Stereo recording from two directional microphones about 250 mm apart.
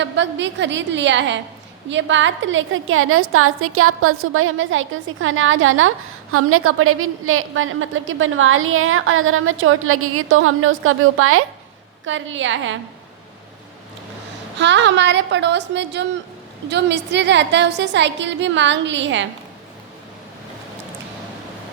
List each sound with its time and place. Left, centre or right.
0.0 s a woman's voice: right
14.6 s a woman's voice: right